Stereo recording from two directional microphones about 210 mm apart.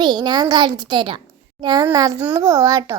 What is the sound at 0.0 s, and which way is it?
A child's voice, 20° right (ahead or behind).